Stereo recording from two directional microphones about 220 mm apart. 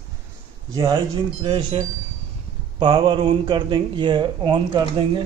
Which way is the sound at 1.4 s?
25° right (ahead or behind).